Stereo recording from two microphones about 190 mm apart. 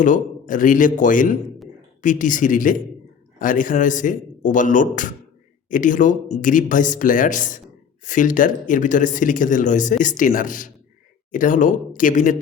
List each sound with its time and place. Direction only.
0.0 s speech: 45° left (ahead or behind)